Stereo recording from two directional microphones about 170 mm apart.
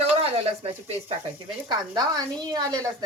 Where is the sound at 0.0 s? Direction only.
35° right (ahead or behind).